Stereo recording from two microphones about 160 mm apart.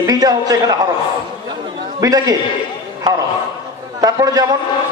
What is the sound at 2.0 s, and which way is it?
Speech, 20° right (ahead or behind).